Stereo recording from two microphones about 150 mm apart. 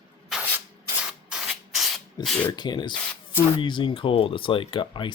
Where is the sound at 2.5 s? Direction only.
30° left (ahead or behind).